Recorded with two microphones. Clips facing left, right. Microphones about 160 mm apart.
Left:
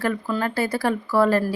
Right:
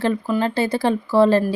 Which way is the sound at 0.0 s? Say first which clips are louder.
Right 4 dB; 20° right (ahead or behind).